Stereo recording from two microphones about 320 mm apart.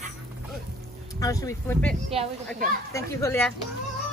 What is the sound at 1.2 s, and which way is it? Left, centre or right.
Speech, centre.